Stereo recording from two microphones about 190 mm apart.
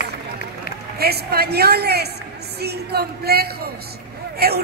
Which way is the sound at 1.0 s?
55° right (ahead or behind).